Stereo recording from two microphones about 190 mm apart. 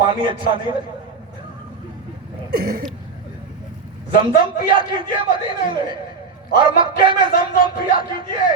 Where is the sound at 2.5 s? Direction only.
50° right (ahead or behind).